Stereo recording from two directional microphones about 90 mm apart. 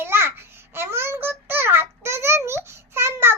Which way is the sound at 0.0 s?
25° right (ahead or behind).